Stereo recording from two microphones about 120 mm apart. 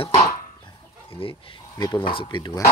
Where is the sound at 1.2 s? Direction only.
50° left (ahead or behind).